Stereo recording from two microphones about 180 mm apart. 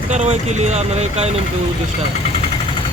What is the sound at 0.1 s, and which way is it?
Speech, 40° right (ahead or behind).